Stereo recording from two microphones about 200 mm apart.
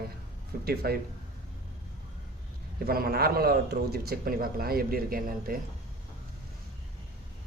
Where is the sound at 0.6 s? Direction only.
50° right (ahead or behind).